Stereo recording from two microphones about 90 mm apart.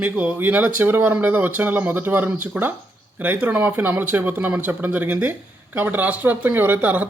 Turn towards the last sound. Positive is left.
turn(degrees=-20)  # may be behind; listen again after turning